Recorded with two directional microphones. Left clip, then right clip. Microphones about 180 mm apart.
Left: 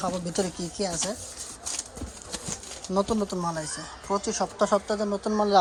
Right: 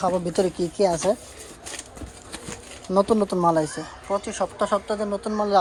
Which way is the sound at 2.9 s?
20° left (ahead or behind).